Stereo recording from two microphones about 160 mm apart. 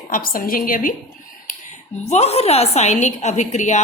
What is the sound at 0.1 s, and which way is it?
Speech, 65° left (ahead or behind).